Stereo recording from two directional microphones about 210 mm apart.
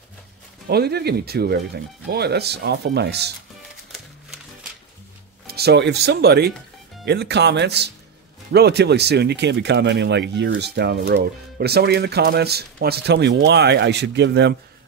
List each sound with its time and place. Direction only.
0.7 s speech: 50° right (ahead or behind)
5.5 s speech: 50° right (ahead or behind)